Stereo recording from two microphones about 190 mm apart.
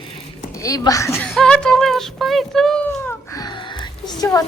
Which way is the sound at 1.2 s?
Centre (ahead or behind).